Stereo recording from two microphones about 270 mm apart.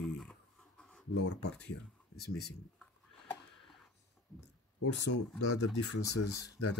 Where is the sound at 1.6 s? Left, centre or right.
Left.